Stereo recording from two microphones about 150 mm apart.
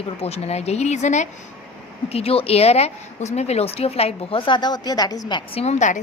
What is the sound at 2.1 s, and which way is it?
A woman's voice, 40° left (ahead or behind).